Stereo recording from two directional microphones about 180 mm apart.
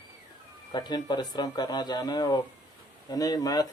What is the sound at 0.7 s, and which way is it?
Speech, 25° left (ahead or behind).